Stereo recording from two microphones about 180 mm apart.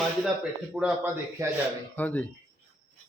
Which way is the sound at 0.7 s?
5° right (ahead or behind).